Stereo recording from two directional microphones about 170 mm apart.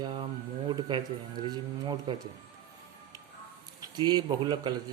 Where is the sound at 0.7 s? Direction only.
25° right (ahead or behind).